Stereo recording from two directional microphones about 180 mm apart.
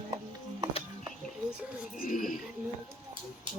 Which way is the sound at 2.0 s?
50° left (ahead or behind).